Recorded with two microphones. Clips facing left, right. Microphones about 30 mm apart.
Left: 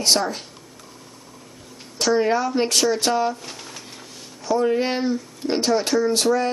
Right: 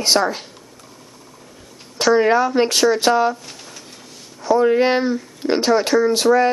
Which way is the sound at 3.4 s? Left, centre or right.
Centre.